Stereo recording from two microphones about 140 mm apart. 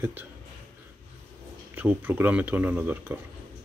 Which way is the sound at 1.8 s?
15° right (ahead or behind).